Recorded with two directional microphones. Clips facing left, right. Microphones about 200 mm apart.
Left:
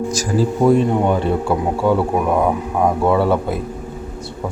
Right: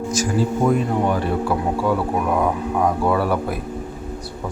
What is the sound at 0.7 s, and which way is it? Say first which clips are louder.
Speech: left 4 dB; 25° left (ahead or behind).